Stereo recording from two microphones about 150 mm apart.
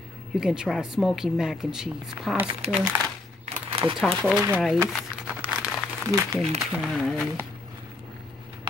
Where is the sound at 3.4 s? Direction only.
35° right (ahead or behind).